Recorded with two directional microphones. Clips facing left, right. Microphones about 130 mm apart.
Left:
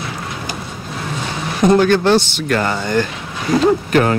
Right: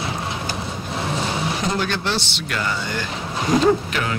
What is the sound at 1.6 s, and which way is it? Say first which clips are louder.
Speech: left 11 dB; 50° left (ahead or behind).